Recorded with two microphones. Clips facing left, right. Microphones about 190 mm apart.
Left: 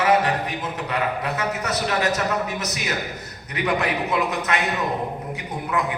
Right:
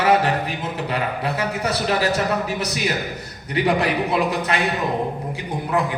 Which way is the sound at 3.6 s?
30° right (ahead or behind).